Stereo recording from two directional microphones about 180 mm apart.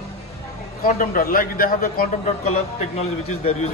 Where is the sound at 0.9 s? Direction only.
50° left (ahead or behind).